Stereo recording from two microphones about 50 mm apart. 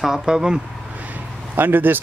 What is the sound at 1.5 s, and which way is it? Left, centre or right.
Speech, right.